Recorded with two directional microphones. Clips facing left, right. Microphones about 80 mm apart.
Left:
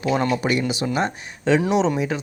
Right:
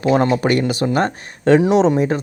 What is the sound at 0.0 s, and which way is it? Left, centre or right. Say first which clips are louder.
Speech: right 6 dB; right.